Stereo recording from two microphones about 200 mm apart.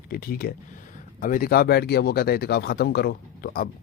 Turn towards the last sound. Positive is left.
turn(degrees=50)  # may be behind; listen again after turning